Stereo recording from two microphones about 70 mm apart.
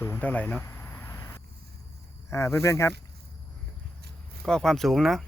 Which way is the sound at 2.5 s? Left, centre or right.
Left.